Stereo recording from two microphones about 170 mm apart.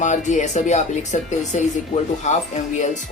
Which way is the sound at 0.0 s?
45° left (ahead or behind).